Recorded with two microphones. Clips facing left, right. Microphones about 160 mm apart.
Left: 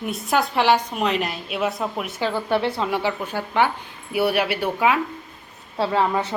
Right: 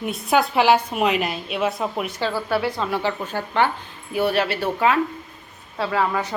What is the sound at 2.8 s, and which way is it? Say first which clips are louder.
A woman's voice: even; 15° left (ahead or behind).